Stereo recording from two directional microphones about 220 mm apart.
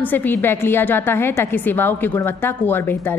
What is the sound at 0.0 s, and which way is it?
A woman's voice, 10° left (ahead or behind).